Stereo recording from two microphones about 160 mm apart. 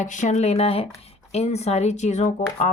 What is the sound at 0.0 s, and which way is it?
A woman's voice, 50° left (ahead or behind).